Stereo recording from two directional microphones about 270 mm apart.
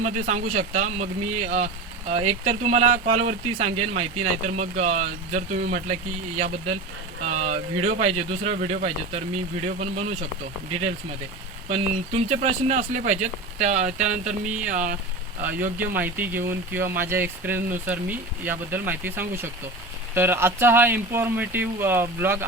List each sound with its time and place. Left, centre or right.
0.0 s speech: right
11.7 s speech: right
16.0 s speech: centre